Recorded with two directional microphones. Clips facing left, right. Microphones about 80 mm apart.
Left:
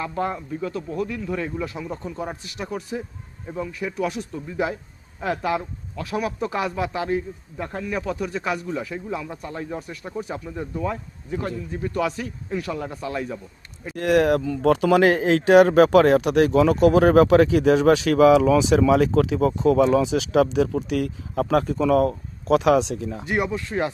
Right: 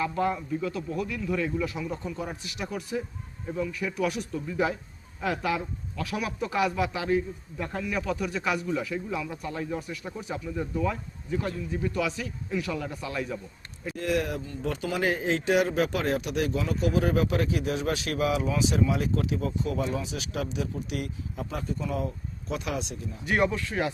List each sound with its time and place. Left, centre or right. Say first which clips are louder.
0.0 s a man's voice: left 1 dB; left
13.9 s speech: left 10 dB; left
23.2 s speech: right 1 dB; left